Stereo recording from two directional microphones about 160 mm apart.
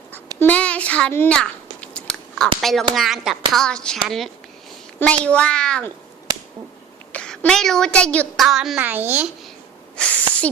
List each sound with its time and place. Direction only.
0.3 s chewing: 10° left (ahead or behind)
2.6 s a woman's voice: centre (ahead or behind)
7.1 s a woman's voice: 5° left (ahead or behind); by 9.3 s 10° right (ahead or behind)
10.0 s a child's voice: 5° left (ahead or behind)